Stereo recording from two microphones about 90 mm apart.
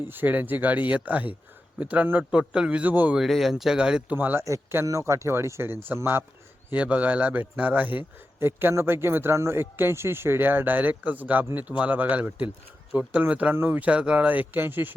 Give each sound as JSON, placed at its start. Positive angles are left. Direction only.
{"t": 0.0, "sound": "a man's voice", "side_deg": -20}
{"t": 3.2, "sound": "speech", "side_deg": 0}
{"t": 4.2, "sound": "a man's voice", "side_deg": -20}